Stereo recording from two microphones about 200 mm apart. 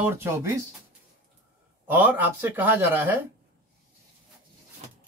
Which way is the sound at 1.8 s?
10° right (ahead or behind).